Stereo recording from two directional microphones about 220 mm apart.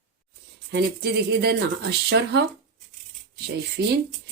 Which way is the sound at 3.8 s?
50° right (ahead or behind).